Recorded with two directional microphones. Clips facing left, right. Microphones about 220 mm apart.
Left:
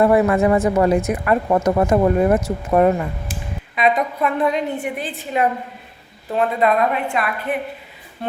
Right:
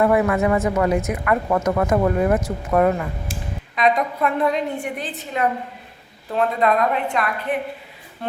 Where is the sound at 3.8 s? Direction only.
5° left (ahead or behind).